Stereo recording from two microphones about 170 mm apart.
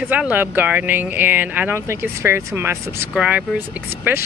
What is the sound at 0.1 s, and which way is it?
Speech, 10° right (ahead or behind).